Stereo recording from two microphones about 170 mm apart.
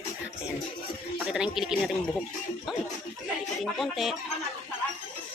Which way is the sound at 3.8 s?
Centre (ahead or behind).